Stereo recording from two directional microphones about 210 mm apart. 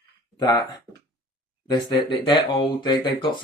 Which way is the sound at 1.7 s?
20° left (ahead or behind).